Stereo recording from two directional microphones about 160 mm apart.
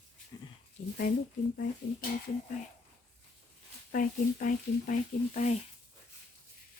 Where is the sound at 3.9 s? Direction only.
55° left (ahead or behind).